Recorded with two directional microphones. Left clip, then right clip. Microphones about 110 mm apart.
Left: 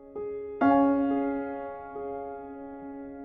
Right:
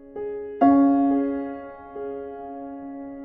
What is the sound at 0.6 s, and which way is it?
Music, 20° right (ahead or behind).